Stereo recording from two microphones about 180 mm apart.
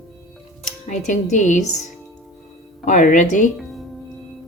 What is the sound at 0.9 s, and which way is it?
Speech, 40° left (ahead or behind).